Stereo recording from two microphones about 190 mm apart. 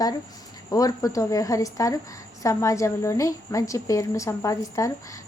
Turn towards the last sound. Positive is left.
turn(degrees=15)  # may be behind; listen again after turning